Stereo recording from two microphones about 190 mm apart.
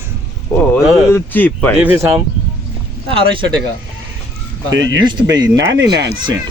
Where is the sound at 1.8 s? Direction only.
10° right (ahead or behind).